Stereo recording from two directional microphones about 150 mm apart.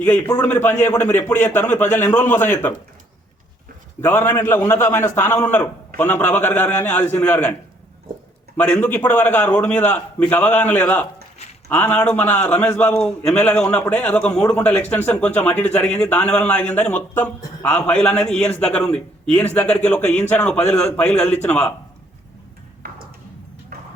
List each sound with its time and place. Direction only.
0.0 s a man's voice: 10° left (ahead or behind)
4.0 s a man's voice: 15° left (ahead or behind)
8.5 s a man's voice: 10° left (ahead or behind)
22.8 s ping: 90° right
23.7 s clip-clop: 90° right